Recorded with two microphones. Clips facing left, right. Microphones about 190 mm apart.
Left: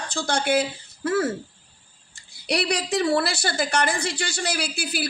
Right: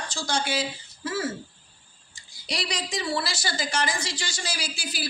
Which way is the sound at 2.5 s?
60° left (ahead or behind).